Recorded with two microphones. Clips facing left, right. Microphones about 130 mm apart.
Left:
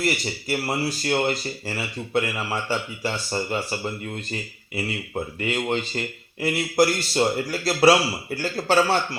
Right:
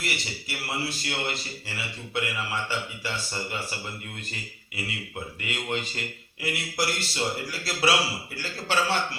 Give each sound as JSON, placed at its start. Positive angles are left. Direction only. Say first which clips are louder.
{"t": 0.0, "sound": "speech", "louder": "left 8 dB", "side_deg": 40}
{"t": 4.7, "sound": "speech", "louder": "left 7 dB", "side_deg": 35}